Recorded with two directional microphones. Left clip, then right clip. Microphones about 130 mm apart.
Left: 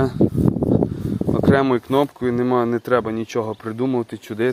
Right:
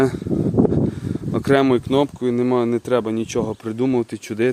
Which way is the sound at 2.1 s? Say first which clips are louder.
Even; 30° right (ahead or behind).